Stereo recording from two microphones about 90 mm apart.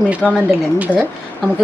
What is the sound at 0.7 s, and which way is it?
Speech, 15° right (ahead or behind).